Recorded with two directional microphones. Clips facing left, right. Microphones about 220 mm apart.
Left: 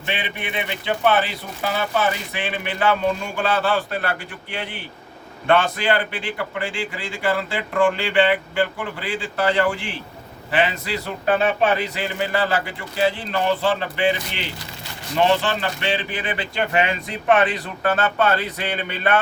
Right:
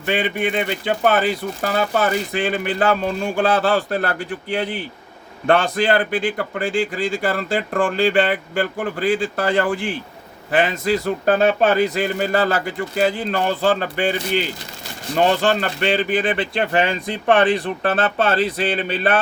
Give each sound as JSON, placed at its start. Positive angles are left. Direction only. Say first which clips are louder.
{"t": 0.0, "sound": "speech", "louder": "right 8 dB", "side_deg": -45}
{"t": 3.4, "sound": "speech", "louder": "right 3 dB", "side_deg": -35}